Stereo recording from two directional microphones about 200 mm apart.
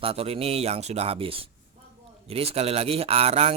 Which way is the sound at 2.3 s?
30° right (ahead or behind).